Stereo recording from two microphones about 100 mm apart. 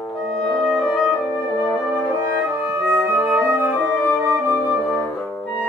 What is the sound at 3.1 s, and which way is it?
Flute, 20° right (ahead or behind).